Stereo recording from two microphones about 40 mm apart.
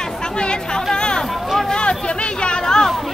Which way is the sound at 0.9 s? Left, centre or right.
Left.